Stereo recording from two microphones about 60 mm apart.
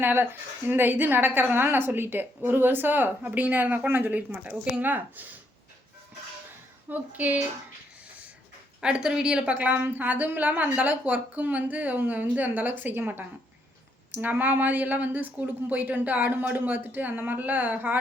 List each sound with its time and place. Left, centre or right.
0.0 s a woman's voice: right
6.8 s a woman's voice: right
8.8 s a woman's voice: centre
9.6 s a woman's voice: right